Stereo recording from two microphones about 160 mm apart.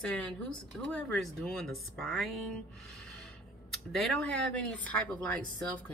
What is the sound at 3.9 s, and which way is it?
A woman's voice, centre (ahead or behind).